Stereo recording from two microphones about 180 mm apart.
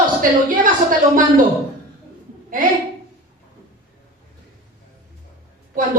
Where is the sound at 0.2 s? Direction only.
50° right (ahead or behind).